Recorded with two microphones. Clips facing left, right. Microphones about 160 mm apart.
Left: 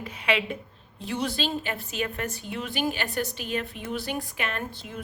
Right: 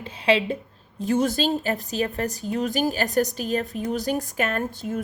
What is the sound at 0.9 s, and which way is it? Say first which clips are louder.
A woman's voice: right 7 dB; 45° right (ahead or behind).